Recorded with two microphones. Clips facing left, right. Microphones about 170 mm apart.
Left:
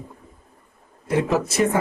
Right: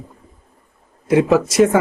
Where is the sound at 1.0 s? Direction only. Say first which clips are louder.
Right 7 dB; 90° right.